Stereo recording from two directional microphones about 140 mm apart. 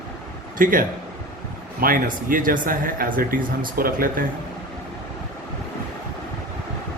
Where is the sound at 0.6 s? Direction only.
80° right.